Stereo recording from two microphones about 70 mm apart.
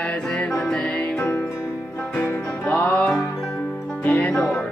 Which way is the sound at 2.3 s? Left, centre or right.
Left.